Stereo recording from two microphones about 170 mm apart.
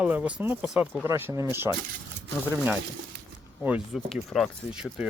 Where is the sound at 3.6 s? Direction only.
5° right (ahead or behind).